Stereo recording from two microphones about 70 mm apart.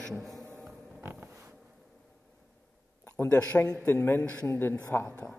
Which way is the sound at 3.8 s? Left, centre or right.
Left.